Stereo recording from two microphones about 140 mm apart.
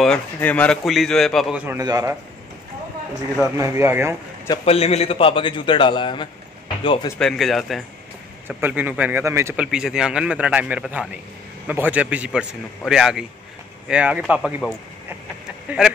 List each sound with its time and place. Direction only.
0.0 s speech: 10° left (ahead or behind)
1.7 s a man's voice: 25° right (ahead or behind)
3.5 s speech: 20° right (ahead or behind)
4.6 s a man's voice: 45° left (ahead or behind)
7.2 s speech: centre (ahead or behind)
8.5 s speech: 15° right (ahead or behind)
9.6 s speech: 5° right (ahead or behind)
15.8 s speech: 5° right (ahead or behind)